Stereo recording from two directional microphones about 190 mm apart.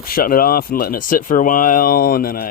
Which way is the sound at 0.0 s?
50° left (ahead or behind).